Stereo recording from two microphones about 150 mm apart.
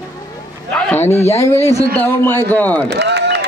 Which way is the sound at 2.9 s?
90° right.